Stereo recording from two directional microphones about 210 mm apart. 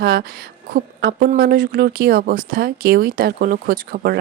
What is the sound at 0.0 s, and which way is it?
Speech, 45° right (ahead or behind).